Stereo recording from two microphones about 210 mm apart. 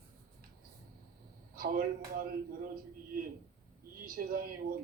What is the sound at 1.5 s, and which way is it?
Speech, 45° right (ahead or behind).